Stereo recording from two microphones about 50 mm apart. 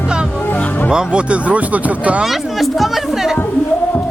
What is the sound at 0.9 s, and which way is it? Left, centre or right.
Speech, right.